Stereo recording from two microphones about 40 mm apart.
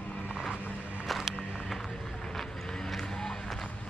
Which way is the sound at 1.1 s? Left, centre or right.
Centre.